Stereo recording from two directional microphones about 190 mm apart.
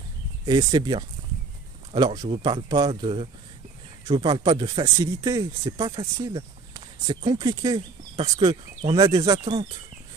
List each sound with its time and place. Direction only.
0.5 s speech: 20° right (ahead or behind)